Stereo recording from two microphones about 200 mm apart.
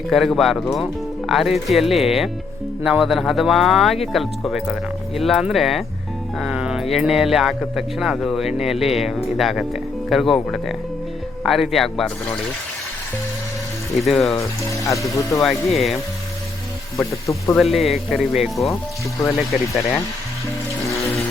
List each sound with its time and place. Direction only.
0.1 s speech: centre (ahead or behind)
14.0 s speech: centre (ahead or behind)
14.3 s speech: 15° left (ahead or behind)
15.4 s speech: centre (ahead or behind)
17.0 s speech: 15° left (ahead or behind)
17.6 s speech: centre (ahead or behind)